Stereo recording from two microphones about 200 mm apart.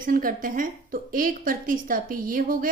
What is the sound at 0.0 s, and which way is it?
A woman's voice, 45° right (ahead or behind).